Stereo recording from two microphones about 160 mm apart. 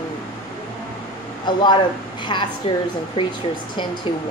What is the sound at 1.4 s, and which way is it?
Speech, 30° left (ahead or behind).